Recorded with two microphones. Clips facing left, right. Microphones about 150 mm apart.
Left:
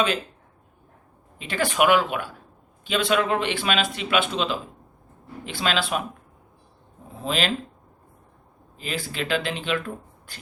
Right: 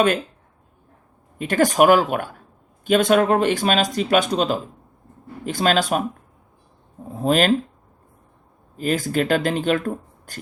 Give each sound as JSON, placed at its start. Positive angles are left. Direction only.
{"t": 1.4, "sound": "speech", "side_deg": -45}
{"t": 7.2, "sound": "speech", "side_deg": -45}
{"t": 8.7, "sound": "speech", "side_deg": -45}